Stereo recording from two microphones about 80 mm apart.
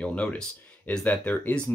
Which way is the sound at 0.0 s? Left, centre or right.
Centre.